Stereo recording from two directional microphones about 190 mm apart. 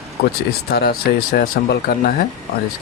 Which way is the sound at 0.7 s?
50° left (ahead or behind).